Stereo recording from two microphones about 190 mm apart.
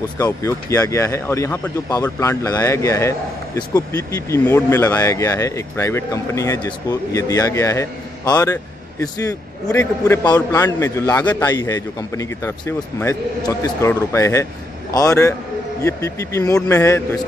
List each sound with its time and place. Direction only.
0.2 s speech: 15° left (ahead or behind)